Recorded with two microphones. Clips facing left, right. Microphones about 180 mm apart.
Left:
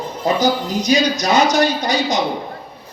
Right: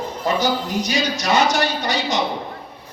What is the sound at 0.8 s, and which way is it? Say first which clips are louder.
Speech: left 5 dB; 15° left (ahead or behind).